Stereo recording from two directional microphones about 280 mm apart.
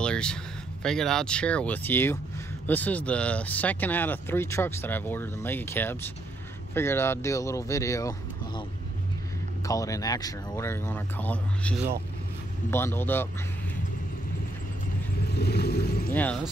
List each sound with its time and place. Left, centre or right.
0.0 s a sound: centre
0.8 s speech: centre
9.7 s speech: centre
15.2 s speech: left
16.1 s speech: centre